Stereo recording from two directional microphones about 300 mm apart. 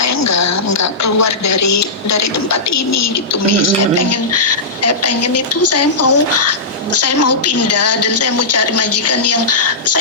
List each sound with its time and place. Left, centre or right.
0.0 s a woman's voice: left